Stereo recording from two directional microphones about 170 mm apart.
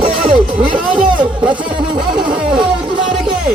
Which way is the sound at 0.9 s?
30° right (ahead or behind).